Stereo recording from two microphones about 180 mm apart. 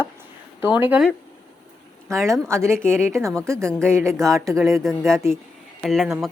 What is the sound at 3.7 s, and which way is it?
Speech, 5° left (ahead or behind).